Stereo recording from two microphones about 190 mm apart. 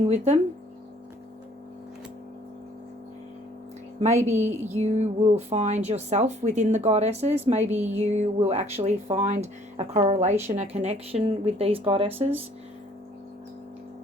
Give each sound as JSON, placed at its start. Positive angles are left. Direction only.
{"t": 0.0, "sound": "a woman's voice", "side_deg": -35}
{"t": 4.2, "sound": "a woman's voice", "side_deg": -35}